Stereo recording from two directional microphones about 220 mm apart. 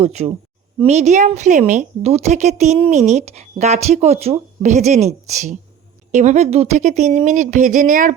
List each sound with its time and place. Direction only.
0.0 s a woman's voice: 30° right (ahead or behind)